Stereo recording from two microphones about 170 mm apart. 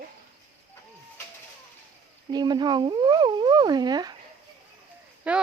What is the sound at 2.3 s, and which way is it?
Speech, 25° right (ahead or behind).